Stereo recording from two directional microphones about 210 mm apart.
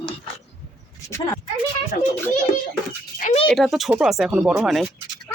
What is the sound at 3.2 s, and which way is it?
Speech, 35° left (ahead or behind).